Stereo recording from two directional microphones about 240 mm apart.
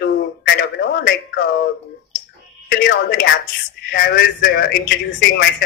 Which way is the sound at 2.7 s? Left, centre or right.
Left.